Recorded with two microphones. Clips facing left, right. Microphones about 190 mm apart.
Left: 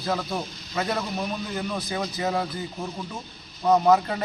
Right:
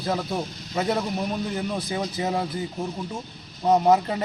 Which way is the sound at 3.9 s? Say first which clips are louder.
Even; 20° right (ahead or behind).